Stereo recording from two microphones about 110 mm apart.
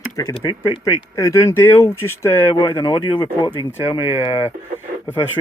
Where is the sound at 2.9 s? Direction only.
50° left (ahead or behind); by 4.5 s 65° left (ahead or behind).